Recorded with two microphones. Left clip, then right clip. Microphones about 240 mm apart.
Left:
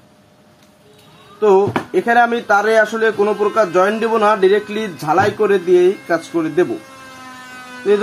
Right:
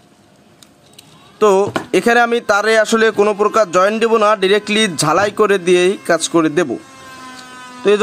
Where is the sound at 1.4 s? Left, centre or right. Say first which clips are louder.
Even; right.